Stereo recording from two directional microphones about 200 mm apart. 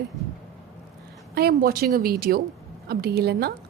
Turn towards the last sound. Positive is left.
turn(degrees=-50)  # may be behind; listen again after turning